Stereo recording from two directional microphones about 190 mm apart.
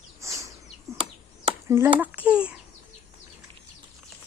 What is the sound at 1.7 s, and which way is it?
Speech, 10° right (ahead or behind).